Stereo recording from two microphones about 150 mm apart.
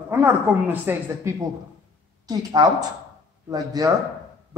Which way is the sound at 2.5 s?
25° right (ahead or behind).